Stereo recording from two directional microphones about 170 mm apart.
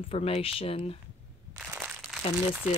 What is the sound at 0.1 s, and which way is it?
Speech, 35° left (ahead or behind).